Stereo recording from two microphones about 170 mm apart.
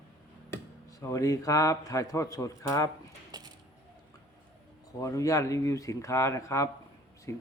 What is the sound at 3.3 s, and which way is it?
Coin, 25° right (ahead or behind).